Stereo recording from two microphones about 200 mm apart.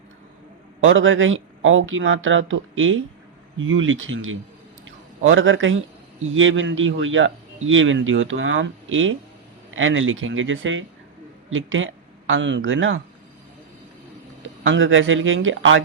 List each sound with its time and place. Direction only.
0.8 s a man's voice: 80° right
14.6 s a man's voice: 75° right (ahead or behind)